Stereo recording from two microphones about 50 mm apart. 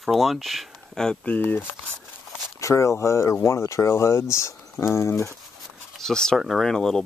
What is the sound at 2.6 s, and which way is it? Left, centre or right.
Speech, left.